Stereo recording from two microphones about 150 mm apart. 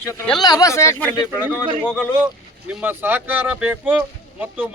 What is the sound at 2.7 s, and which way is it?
Speech, 10° right (ahead or behind).